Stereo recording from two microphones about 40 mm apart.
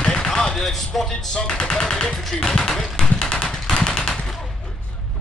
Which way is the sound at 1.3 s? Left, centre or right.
Left.